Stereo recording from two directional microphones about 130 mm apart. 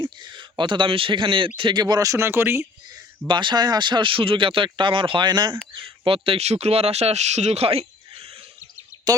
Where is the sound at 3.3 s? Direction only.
35° right (ahead or behind).